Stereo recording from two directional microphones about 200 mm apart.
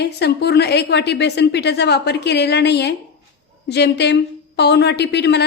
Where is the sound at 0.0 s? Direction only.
55° left (ahead or behind).